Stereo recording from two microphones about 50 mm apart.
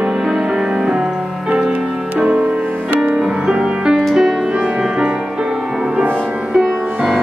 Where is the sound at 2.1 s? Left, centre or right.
Right.